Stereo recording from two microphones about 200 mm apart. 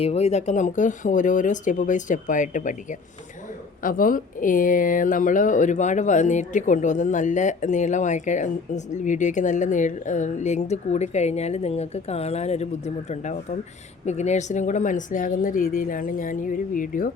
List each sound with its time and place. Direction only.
0.0 s speech: 30° left (ahead or behind)
3.8 s speech: 45° left (ahead or behind)